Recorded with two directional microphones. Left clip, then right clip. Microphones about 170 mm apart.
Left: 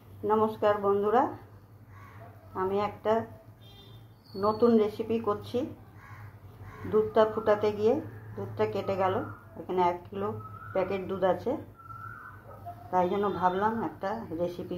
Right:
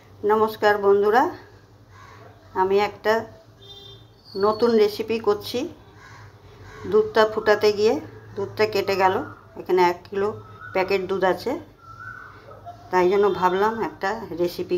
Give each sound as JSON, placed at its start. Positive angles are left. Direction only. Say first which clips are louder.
{"t": 0.3, "sound": "speech", "louder": "right 7 dB", "side_deg": -25}
{"t": 2.5, "sound": "speech", "louder": "right 9 dB", "side_deg": -30}
{"t": 4.4, "sound": "speech", "louder": "right 6 dB", "side_deg": -25}
{"t": 6.9, "sound": "speech", "louder": "right 6 dB", "side_deg": -30}
{"t": 12.9, "sound": "speech", "louder": "right 9 dB", "side_deg": -30}